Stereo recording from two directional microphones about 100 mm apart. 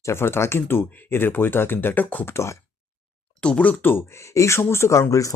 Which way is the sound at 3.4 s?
10° left (ahead or behind).